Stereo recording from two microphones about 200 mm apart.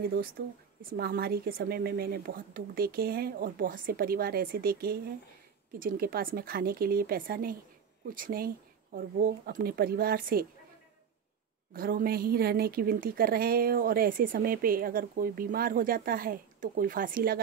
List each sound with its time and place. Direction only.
0.8 s a woman's voice: 50° right (ahead or behind)
11.7 s a woman's voice: 50° right (ahead or behind)